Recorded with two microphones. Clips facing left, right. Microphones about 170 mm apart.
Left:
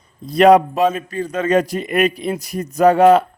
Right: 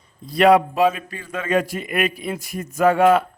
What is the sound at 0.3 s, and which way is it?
A man's voice, 40° left (ahead or behind).